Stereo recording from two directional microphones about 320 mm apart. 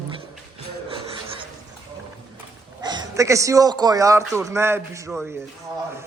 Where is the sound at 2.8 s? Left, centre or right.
Centre.